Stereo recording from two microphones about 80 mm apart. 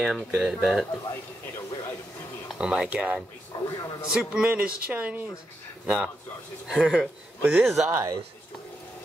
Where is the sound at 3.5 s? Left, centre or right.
Left.